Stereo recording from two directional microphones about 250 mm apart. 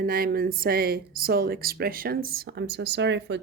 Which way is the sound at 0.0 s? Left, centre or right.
Right.